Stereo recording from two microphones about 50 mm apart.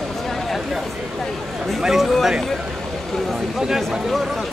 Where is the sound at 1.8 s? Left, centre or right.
Centre.